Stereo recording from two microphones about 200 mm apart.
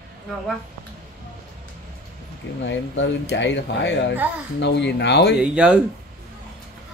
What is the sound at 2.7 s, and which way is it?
Speech, 65° left (ahead or behind).